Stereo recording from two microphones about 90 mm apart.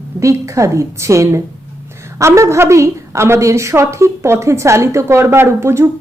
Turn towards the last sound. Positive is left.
turn(degrees=-30)  # may be behind; listen again after turning